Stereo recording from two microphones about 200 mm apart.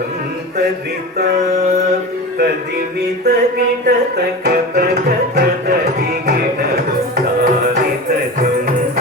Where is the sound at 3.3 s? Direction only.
55° right (ahead or behind).